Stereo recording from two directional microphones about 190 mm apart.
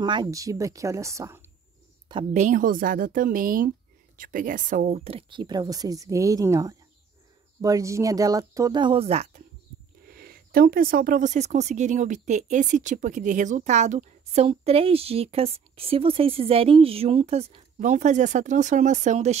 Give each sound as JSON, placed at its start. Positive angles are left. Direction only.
{"t": 0.0, "sound": "speech", "side_deg": -25}
{"t": 2.3, "sound": "a woman's voice", "side_deg": -40}
{"t": 10.0, "sound": "speech", "side_deg": -50}